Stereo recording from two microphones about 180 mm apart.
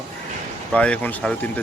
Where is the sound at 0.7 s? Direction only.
5° left (ahead or behind).